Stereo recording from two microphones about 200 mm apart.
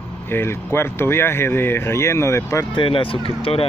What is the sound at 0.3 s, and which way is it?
Speech, 10° left (ahead or behind).